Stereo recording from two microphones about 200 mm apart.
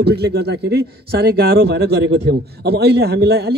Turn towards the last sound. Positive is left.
turn(degrees=-55)  # may be behind; listen again after turning